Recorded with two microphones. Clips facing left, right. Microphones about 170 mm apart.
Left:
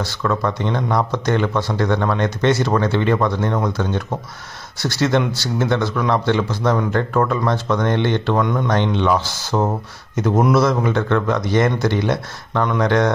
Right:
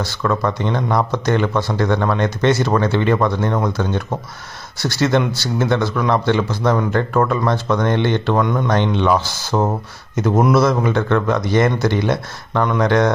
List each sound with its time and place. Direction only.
0.2 s speech: 15° right (ahead or behind)